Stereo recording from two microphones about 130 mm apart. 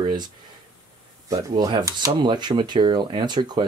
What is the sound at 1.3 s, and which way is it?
Speech, 30° right (ahead or behind).